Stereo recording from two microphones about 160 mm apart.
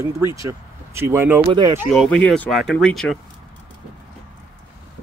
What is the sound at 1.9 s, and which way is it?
Speech, 5° left (ahead or behind).